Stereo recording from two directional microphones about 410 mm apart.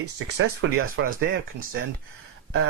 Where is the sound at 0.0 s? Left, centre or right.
Right.